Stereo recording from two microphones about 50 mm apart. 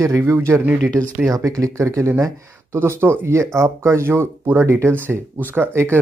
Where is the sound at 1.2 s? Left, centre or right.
Right.